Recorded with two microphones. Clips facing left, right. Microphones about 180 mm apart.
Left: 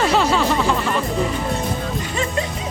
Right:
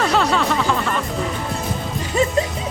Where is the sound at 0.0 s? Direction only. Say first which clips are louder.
Left 1 dB; centre (ahead or behind).